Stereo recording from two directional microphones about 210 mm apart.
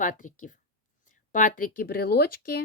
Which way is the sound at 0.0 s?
40° left (ahead or behind).